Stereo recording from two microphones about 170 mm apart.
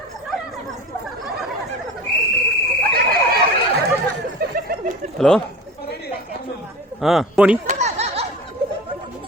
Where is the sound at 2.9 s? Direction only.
60° right (ahead or behind).